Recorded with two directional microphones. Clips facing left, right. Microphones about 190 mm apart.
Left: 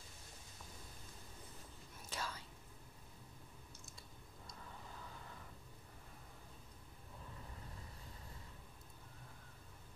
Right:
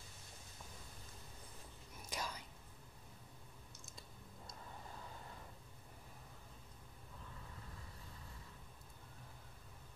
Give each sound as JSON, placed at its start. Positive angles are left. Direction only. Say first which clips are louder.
{"t": 2.0, "sound": "whispering", "louder": "right 1 dB", "side_deg": -15}